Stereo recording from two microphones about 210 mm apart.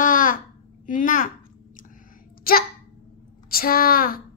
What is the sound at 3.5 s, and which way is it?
Speech, 45° left (ahead or behind).